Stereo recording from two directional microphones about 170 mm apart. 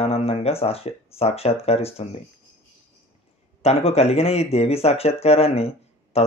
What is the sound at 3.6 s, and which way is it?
Speech, 35° left (ahead or behind).